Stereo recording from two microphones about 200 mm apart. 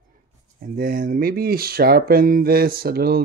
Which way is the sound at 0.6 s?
45° right (ahead or behind).